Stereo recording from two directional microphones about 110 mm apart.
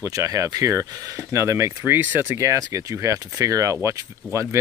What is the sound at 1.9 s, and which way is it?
Speech, 15° right (ahead or behind).